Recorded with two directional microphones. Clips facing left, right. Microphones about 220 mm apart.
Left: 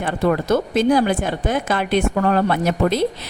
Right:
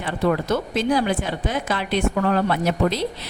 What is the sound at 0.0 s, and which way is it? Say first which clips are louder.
Speech: left 2 dB; 45° left (ahead or behind).